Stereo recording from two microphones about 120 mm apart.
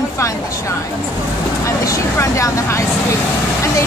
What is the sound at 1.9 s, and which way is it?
Speech, 25° left (ahead or behind).